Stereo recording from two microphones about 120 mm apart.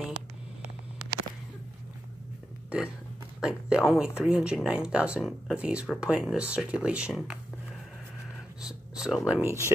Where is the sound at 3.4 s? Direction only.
5° right (ahead or behind).